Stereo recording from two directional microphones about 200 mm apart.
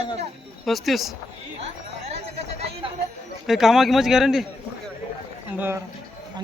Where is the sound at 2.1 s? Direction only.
30° right (ahead or behind).